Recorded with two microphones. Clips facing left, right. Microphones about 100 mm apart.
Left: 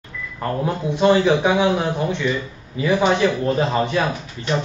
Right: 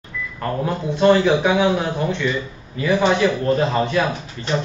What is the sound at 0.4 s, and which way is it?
A man's voice, 15° left (ahead or behind).